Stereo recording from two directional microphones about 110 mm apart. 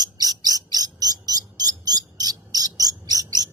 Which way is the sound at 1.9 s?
35° right (ahead or behind).